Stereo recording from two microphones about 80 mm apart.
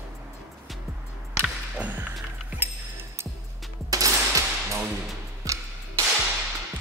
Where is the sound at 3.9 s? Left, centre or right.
Right.